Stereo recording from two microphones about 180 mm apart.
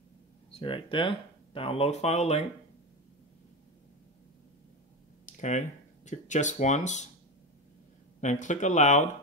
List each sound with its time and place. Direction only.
0.5 s speech: 30° left (ahead or behind)
5.2 s a sound: 45° left (ahead or behind)
6.0 s speech: 40° left (ahead or behind)
8.2 s speech: 40° left (ahead or behind)